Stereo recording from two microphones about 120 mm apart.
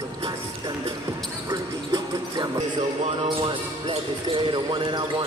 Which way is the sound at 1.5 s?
35° right (ahead or behind).